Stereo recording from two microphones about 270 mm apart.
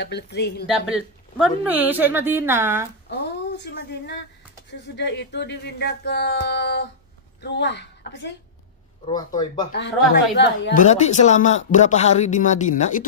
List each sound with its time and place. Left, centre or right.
0.0 s speech: left
0.7 s a woman's voice: centre
3.1 s speech: left
9.0 s speech: centre
9.8 s a woman's voice: left